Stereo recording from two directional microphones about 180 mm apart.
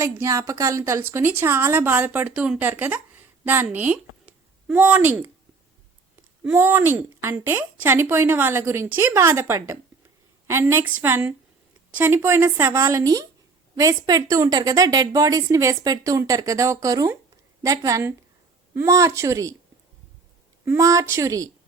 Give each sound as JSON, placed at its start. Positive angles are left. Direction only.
{"t": 0.0, "sound": "a woman's voice", "side_deg": -15}
{"t": 6.5, "sound": "a woman's voice", "side_deg": -10}
{"t": 20.7, "sound": "a woman's voice", "side_deg": -15}